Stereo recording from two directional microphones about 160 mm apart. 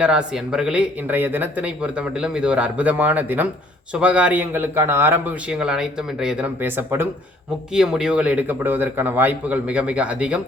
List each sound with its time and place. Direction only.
0.0 s speech: 5° right (ahead or behind)